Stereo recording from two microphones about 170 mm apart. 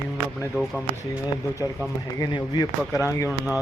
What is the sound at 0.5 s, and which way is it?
Speech, centre (ahead or behind).